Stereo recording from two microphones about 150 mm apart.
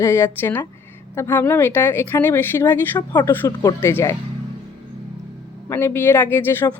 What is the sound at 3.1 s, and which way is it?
Speech, 25° left (ahead or behind).